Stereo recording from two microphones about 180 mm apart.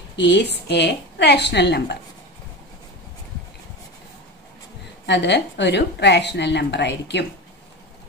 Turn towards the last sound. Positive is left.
turn(degrees=70)  # may be behind; listen again after turning